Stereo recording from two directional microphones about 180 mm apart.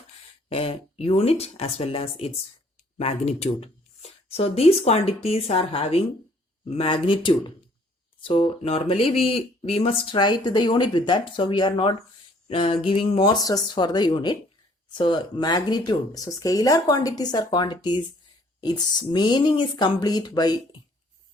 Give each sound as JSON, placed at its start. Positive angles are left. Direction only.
{"t": 0.5, "sound": "speech", "side_deg": 35}